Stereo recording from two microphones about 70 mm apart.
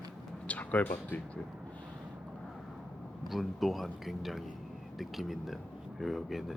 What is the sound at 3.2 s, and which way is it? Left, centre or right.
Speech, centre.